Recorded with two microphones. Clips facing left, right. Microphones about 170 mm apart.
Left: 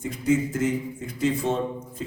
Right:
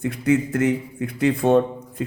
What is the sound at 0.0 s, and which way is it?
A man's voice, 65° right (ahead or behind).